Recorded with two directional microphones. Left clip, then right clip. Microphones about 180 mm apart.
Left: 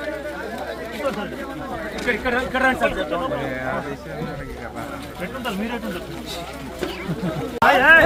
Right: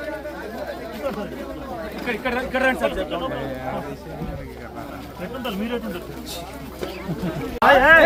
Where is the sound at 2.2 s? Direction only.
15° right (ahead or behind).